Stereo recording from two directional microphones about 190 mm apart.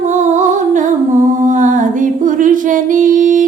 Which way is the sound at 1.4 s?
40° right (ahead or behind).